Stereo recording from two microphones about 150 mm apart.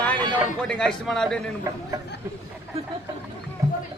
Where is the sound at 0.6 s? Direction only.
5° left (ahead or behind).